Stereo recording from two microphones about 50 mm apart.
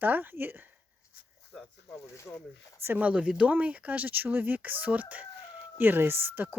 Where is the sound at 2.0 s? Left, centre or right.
Left.